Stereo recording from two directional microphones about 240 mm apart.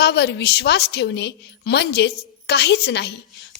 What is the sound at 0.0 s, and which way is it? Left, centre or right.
A woman's voice, left.